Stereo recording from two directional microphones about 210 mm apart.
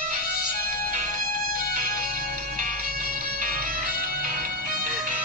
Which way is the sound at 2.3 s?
40° right (ahead or behind).